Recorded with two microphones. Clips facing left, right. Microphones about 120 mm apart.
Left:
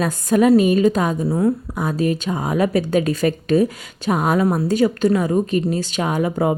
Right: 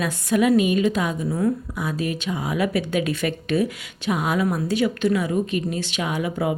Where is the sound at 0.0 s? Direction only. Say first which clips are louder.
Left 4 dB; 40° left (ahead or behind).